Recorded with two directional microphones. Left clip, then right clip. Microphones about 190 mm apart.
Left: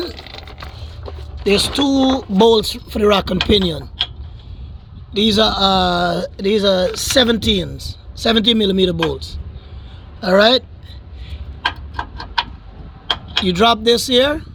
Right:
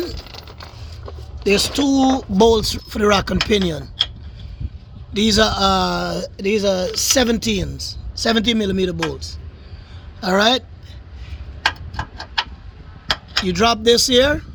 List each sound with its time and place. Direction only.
1.5 s speech: 20° right (ahead or behind)
5.1 s a man's voice: 20° right (ahead or behind); by 9.0 s centre (ahead or behind)
10.2 s speech: 15° right (ahead or behind)
13.4 s speech: 10° right (ahead or behind)
13.8 s speech: 20° right (ahead or behind)